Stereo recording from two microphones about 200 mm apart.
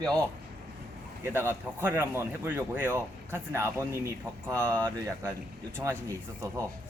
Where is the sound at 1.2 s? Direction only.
10° right (ahead or behind).